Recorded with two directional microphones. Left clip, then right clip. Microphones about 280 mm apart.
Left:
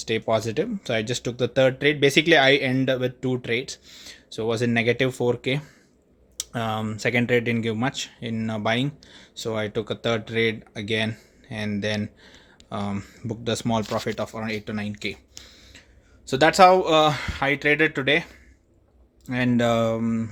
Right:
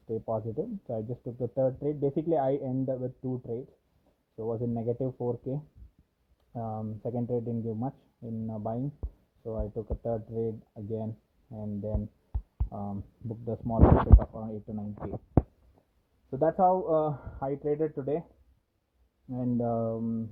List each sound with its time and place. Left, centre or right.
0.3 s speech: left
16.4 s speech: left
19.3 s speech: left